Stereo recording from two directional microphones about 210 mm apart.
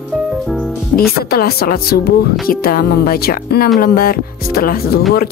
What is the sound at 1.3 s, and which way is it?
Speech, 45° left (ahead or behind).